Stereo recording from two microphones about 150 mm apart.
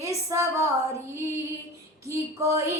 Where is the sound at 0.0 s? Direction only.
20° right (ahead or behind).